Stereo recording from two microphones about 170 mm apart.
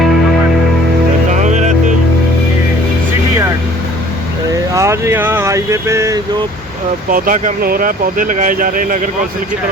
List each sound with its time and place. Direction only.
1.3 s music: 45° right (ahead or behind)
4.7 s vehicle: 15° right (ahead or behind)
7.1 s speech: 50° right (ahead or behind)